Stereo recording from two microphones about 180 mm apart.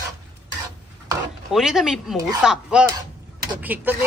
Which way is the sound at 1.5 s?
Centre (ahead or behind).